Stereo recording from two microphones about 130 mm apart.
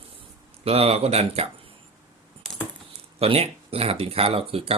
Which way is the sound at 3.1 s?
50° right (ahead or behind).